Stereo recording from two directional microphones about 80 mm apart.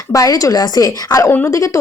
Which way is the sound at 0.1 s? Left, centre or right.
Left.